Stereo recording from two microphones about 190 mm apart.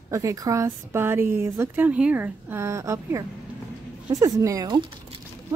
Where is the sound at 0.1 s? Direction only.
15° right (ahead or behind).